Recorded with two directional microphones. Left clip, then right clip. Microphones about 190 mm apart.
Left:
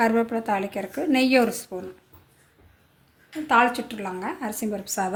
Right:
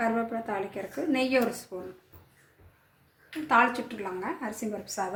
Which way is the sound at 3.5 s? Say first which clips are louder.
Left 4 dB; 60° left (ahead or behind).